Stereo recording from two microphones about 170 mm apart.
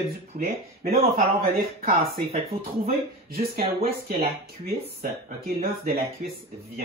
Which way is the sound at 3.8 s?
60° right (ahead or behind).